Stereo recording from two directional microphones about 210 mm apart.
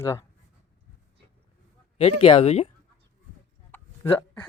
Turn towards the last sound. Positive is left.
turn(degrees=10)  # may be behind; listen again after turning